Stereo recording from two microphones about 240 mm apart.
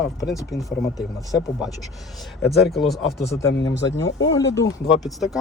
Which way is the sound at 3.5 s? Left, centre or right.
Left.